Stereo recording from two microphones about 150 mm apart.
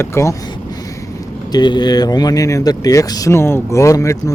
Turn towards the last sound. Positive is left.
turn(degrees=20)  # may be behind; listen again after turning